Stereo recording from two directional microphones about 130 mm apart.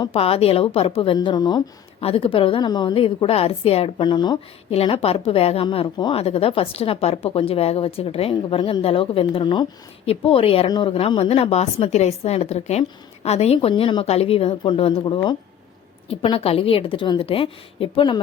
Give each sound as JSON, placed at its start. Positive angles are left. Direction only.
{"t": 0.1, "sound": "a woman's voice", "side_deg": 50}
{"t": 2.0, "sound": "a woman's voice", "side_deg": 45}
{"t": 4.7, "sound": "a woman's voice", "side_deg": 50}